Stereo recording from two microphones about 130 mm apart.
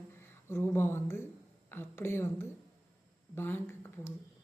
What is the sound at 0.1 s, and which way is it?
Speech, 20° left (ahead or behind).